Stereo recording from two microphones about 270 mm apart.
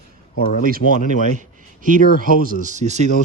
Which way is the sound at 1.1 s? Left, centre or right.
Right.